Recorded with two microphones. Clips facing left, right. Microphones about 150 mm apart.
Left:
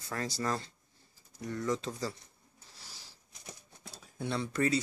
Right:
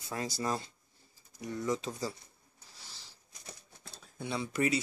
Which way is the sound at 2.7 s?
5° left (ahead or behind).